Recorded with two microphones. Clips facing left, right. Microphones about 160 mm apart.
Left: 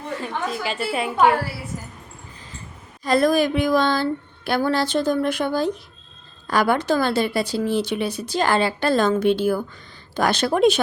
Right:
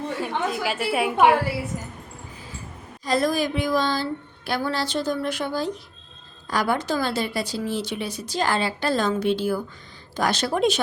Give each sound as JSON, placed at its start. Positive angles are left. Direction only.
{"t": 0.2, "sound": "a woman's voice", "side_deg": -5}
{"t": 3.0, "sound": "speech", "side_deg": 60}